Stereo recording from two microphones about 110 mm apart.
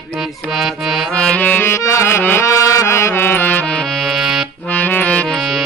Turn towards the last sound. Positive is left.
turn(degrees=15)  # may be behind; listen again after turning